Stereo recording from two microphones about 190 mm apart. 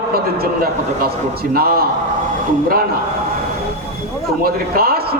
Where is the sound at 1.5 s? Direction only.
50° right (ahead or behind).